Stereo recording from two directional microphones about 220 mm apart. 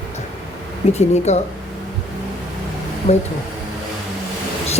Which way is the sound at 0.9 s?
30° left (ahead or behind).